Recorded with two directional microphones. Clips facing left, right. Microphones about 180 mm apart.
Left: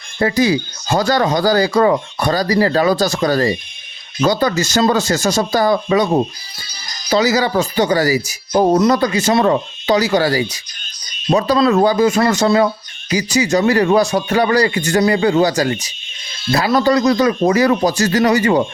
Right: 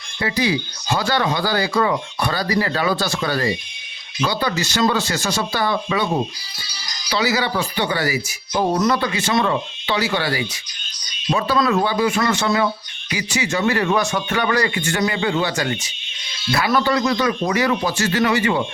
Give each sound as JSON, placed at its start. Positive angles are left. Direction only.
{"t": 0.2, "sound": "speech", "side_deg": 45}